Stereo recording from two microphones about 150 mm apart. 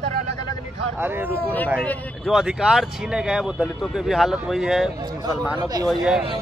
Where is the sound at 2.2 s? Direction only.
Centre (ahead or behind).